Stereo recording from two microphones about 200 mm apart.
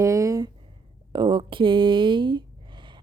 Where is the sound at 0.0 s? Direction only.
15° right (ahead or behind).